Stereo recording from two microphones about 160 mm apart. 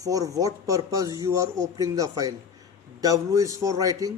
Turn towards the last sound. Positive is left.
turn(degrees=-20)  # may be behind; listen again after turning